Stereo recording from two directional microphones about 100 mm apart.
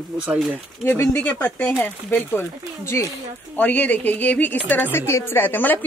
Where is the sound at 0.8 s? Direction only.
25° left (ahead or behind).